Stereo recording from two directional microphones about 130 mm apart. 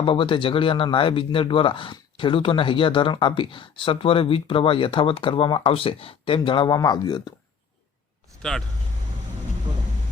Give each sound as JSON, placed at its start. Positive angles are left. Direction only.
{"t": 0.0, "sound": "speech", "side_deg": 40}
{"t": 8.4, "sound": "speech", "side_deg": 5}